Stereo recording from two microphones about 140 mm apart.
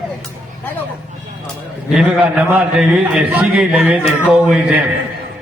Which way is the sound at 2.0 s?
10° right (ahead or behind).